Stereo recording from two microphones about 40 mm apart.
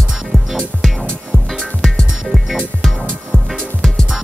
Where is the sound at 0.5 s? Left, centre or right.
Centre.